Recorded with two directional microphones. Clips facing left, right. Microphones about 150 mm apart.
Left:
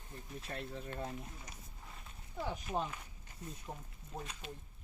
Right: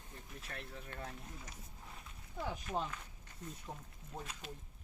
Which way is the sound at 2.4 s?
5° left (ahead or behind).